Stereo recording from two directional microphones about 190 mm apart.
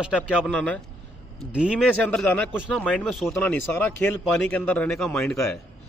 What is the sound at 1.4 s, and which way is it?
Speech, 5° right (ahead or behind).